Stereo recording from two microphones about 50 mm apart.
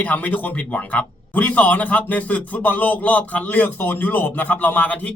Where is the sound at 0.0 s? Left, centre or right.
Left.